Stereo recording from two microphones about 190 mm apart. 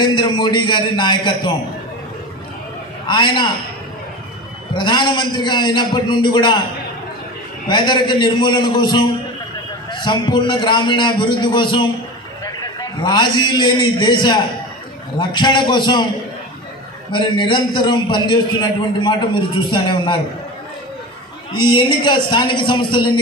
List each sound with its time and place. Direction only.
0.0 s a man's voice: 25° left (ahead or behind)
3.1 s a man's voice: 25° left (ahead or behind)
4.7 s a man's voice: 25° left (ahead or behind)
7.6 s a man's voice: 25° left (ahead or behind)
17.1 s a man's voice: 25° left (ahead or behind)
21.5 s a man's voice: 25° left (ahead or behind)